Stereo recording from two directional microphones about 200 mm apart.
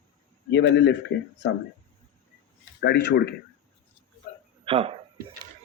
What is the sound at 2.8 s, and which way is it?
Speech, 55° left (ahead or behind).